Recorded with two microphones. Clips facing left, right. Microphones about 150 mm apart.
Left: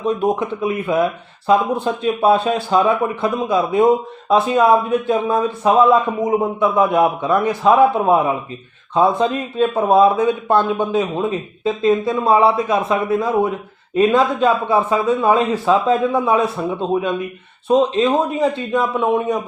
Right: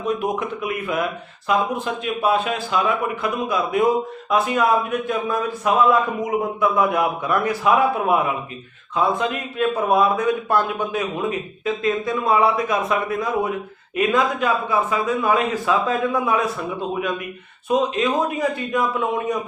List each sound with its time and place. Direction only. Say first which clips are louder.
0.0 s a man's voice: left 5 dB; 30° left (ahead or behind)
17.7 s a man's voice: left 5 dB; 30° left (ahead or behind)